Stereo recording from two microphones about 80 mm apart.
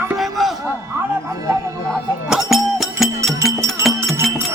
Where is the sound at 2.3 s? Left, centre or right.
Centre.